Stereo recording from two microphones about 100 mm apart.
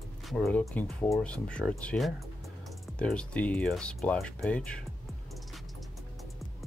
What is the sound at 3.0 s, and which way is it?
Speech, 10° left (ahead or behind).